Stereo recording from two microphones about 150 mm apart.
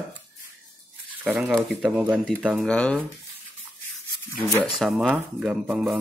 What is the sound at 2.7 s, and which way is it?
Speech, 10° left (ahead or behind).